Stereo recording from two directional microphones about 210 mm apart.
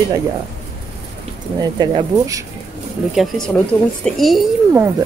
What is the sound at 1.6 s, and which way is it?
Speech, 20° right (ahead or behind).